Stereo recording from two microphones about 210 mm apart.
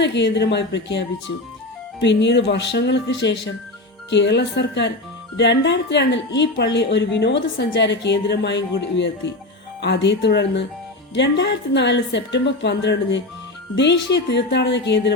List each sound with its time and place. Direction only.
0.0 s a woman's voice: 55° left (ahead or behind)